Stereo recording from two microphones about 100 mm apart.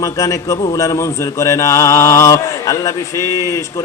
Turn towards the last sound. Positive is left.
turn(degrees=35)  # may be behind; listen again after turning